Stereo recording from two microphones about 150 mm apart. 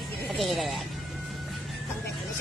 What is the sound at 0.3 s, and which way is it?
Speech, centre (ahead or behind).